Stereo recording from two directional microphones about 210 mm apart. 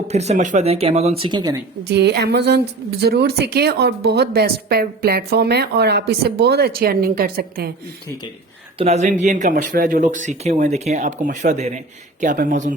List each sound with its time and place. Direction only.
0.1 s speech: 30° right (ahead or behind)
1.9 s a woman's voice: 50° right (ahead or behind)
8.8 s speech: 30° right (ahead or behind)